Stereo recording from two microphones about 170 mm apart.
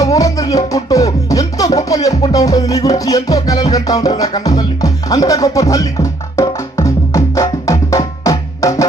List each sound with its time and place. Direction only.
0.0 s music: 20° left (ahead or behind)